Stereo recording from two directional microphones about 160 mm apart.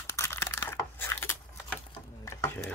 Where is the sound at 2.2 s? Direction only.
15° left (ahead or behind).